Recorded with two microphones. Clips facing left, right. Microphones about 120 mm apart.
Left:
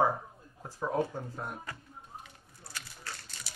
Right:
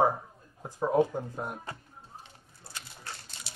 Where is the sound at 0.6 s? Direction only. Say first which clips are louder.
Right 6 dB; 20° right (ahead or behind).